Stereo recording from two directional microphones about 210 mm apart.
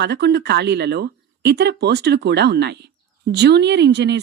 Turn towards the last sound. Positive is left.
turn(degrees=-55)  # may be behind; listen again after turning